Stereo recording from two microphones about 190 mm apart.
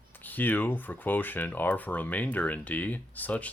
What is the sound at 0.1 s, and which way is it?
Speech, 10° left (ahead or behind).